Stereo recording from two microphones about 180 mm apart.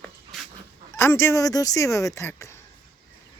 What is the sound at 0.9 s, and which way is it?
Speech, 15° left (ahead or behind).